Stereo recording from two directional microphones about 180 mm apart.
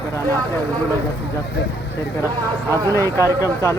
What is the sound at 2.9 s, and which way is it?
Speech, 15° left (ahead or behind).